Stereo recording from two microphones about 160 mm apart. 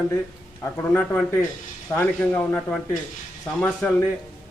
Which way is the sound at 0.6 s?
15° left (ahead or behind).